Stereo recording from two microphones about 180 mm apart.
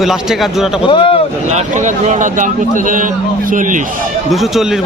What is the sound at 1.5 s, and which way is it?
A man's voice, 45° right (ahead or behind).